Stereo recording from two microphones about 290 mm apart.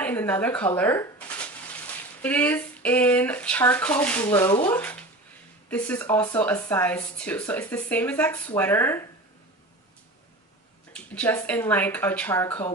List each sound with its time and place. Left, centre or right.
0.0 s speech: centre
10.9 s speech: centre